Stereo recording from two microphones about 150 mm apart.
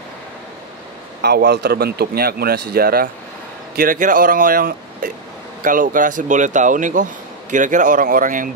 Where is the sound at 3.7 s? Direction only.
70° right (ahead or behind).